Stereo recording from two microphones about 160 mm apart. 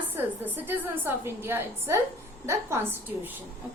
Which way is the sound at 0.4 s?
10° right (ahead or behind).